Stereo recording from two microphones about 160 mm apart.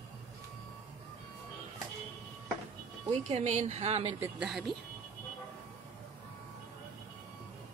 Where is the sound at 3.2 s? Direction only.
45° right (ahead or behind).